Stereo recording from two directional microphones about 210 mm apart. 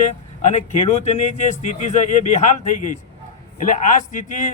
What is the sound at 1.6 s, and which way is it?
Speech, 35° left (ahead or behind).